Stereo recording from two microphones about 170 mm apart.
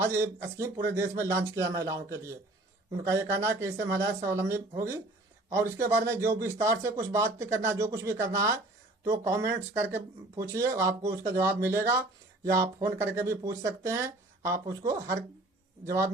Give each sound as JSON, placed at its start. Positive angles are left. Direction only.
{"t": 0.1, "sound": "a man's voice", "side_deg": -15}